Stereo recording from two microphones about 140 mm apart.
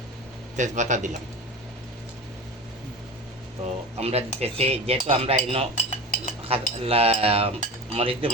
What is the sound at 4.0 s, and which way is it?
Cutlery, 45° right (ahead or behind).